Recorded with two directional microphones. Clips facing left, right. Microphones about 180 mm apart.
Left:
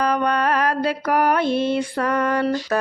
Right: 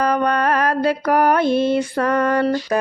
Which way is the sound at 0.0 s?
45° right (ahead or behind).